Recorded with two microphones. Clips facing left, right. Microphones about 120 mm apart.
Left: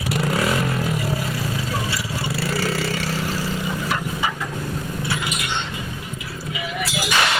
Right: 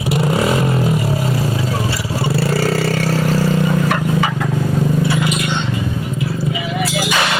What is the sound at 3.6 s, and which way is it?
Vehicle, 65° right (ahead or behind).